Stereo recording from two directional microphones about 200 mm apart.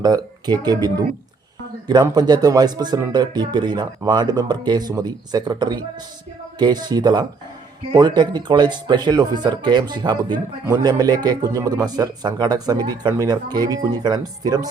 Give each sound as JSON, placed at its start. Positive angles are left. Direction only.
{"t": 0.0, "sound": "speech", "side_deg": -20}